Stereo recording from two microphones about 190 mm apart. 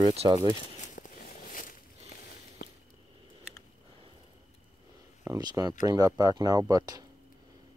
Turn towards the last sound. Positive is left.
turn(degrees=-20)  # may be behind; listen again after turning